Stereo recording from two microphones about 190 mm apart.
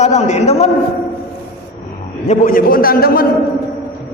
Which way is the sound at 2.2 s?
40° left (ahead or behind).